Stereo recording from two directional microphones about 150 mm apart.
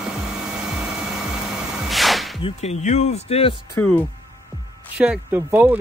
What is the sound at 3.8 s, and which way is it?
Speech, 15° left (ahead or behind).